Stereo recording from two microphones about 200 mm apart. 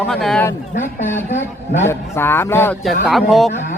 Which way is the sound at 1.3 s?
35° left (ahead or behind).